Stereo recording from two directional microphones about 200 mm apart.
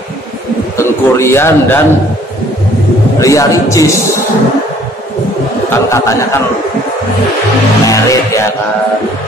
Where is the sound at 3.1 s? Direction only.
15° left (ahead or behind).